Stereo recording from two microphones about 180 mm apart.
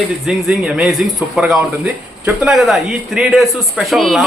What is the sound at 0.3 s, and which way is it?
A man's voice, centre (ahead or behind).